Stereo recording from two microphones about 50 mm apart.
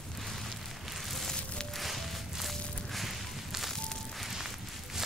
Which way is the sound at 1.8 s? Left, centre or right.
Centre.